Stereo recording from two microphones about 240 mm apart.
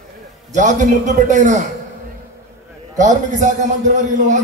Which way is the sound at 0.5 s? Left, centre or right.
Right.